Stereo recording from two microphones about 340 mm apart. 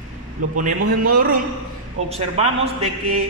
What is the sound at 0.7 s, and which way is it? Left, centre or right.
A man's voice, right.